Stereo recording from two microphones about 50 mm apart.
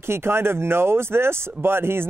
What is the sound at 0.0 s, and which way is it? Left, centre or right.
Speech, right.